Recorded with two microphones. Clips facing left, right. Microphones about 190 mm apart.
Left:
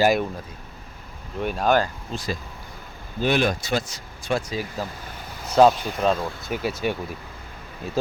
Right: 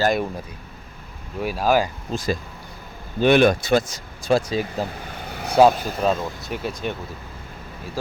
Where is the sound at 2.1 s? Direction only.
40° right (ahead or behind).